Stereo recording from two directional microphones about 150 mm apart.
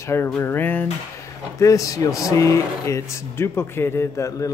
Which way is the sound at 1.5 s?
20° left (ahead or behind).